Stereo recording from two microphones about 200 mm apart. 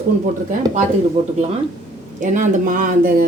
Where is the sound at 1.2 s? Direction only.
35° right (ahead or behind).